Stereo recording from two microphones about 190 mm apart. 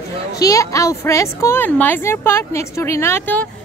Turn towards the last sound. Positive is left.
turn(degrees=10)  # may be behind; listen again after turning